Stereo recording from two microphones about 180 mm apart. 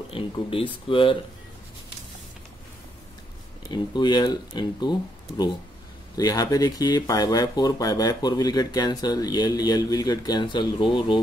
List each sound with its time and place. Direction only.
0.1 s speech: 30° left (ahead or behind)
3.6 s speech: 25° left (ahead or behind)
6.1 s speech: 20° left (ahead or behind)